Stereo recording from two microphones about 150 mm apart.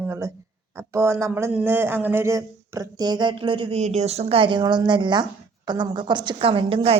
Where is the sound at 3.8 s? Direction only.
45° right (ahead or behind).